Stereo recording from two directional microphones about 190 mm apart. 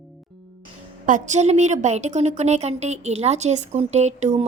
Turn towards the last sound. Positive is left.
turn(degrees=-35)  # may be behind; listen again after turning